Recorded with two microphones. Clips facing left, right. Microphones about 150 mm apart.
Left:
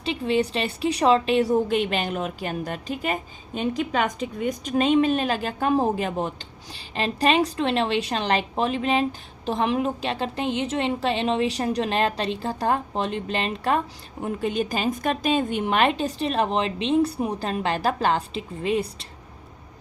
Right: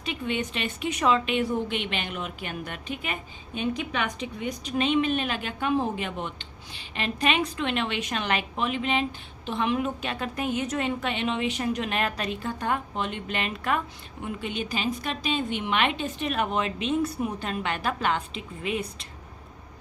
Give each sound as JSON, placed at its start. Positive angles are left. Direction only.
{"t": 0.0, "sound": "a woman's voice", "side_deg": 30}